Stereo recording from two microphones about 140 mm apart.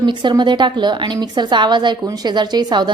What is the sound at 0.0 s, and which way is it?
A woman's voice, 35° right (ahead or behind).